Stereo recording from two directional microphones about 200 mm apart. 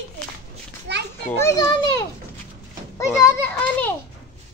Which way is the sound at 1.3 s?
15° left (ahead or behind).